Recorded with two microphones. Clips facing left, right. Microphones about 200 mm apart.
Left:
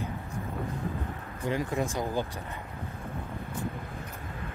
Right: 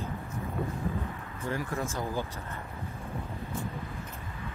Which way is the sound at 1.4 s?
20° left (ahead or behind).